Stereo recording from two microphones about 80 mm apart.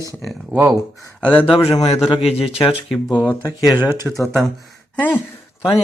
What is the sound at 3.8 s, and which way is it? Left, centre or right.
Speech, right.